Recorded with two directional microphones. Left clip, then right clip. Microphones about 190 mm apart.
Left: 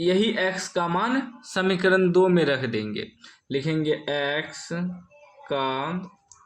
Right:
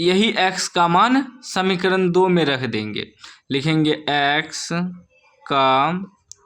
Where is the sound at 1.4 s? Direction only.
25° right (ahead or behind).